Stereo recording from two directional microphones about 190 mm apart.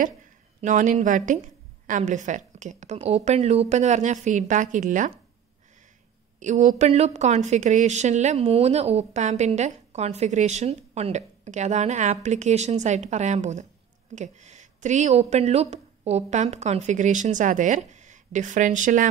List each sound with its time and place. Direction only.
0.6 s speech: 40° right (ahead or behind)
6.4 s speech: 40° right (ahead or behind)